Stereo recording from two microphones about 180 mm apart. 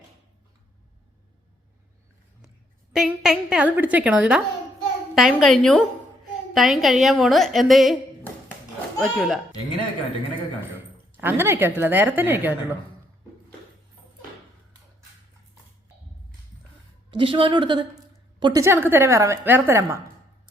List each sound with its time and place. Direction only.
2.9 s a woman's voice: 5° right (ahead or behind)
9.0 s a woman's voice: centre (ahead or behind)
11.2 s a woman's voice: 10° right (ahead or behind)
17.1 s a woman's voice: 30° right (ahead or behind)
18.6 s a woman's voice: 10° right (ahead or behind)